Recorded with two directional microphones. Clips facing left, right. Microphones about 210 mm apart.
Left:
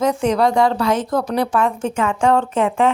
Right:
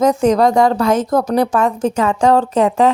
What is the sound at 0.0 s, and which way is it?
A woman's voice, 40° right (ahead or behind).